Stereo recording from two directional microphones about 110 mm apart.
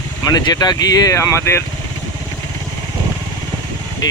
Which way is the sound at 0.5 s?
35° left (ahead or behind).